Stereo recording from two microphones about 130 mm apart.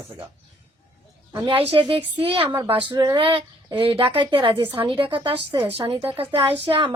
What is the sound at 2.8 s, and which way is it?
Speech, 30° right (ahead or behind).